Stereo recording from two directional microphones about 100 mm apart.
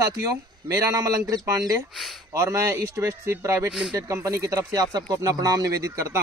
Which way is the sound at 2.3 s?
30° right (ahead or behind).